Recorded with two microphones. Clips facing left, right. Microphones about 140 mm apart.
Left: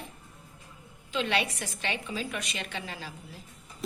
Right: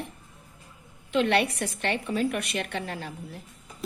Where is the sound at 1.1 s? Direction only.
60° right (ahead or behind).